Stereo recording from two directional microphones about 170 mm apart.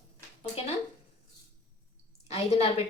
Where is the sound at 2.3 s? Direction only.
35° left (ahead or behind).